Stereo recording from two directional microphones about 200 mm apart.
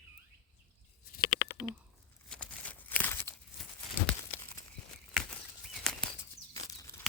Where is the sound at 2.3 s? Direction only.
5° left (ahead or behind).